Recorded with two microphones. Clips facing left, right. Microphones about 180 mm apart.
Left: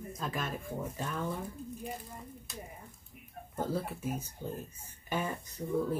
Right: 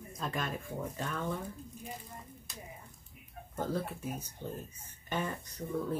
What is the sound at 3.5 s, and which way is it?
Speech, 5° left (ahead or behind).